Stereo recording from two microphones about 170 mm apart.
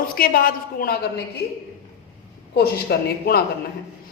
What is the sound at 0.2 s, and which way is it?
Speech, 60° left (ahead or behind).